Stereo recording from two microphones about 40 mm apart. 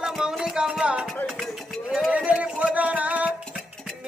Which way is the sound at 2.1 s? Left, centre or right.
Right.